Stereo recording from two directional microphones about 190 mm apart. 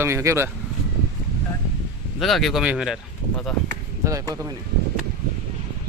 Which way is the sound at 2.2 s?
Centre (ahead or behind).